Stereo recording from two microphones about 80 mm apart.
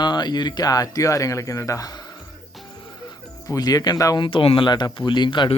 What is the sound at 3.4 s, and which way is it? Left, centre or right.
Speech, left.